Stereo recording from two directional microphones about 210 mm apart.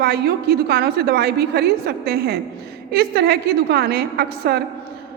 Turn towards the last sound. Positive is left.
turn(degrees=-50)  # may be behind; listen again after turning